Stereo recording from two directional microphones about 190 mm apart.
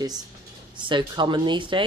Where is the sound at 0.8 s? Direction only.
25° right (ahead or behind).